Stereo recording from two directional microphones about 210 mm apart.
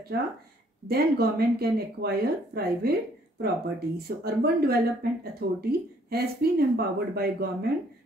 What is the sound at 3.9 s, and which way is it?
Speech, 45° right (ahead or behind).